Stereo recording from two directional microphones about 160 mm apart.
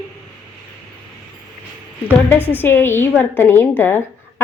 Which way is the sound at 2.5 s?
15° left (ahead or behind).